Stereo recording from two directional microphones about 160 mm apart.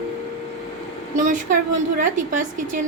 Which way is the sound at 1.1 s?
55° right (ahead or behind).